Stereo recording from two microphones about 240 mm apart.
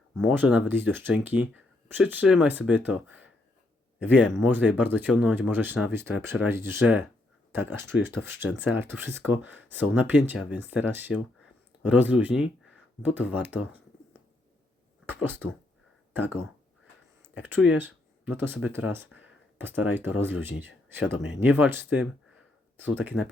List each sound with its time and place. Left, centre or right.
0.2 s speech: centre
15.0 s a sound: centre
17.4 s speech: centre